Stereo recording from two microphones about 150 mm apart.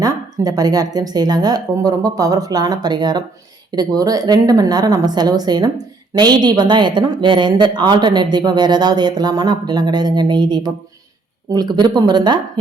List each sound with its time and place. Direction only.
0.0 s a woman's voice: 25° right (ahead or behind)